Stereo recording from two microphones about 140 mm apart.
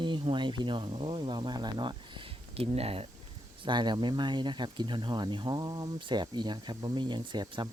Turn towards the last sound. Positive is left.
turn(degrees=-30)  # may be behind; listen again after turning